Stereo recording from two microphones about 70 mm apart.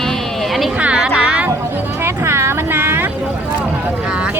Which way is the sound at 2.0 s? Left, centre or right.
Right.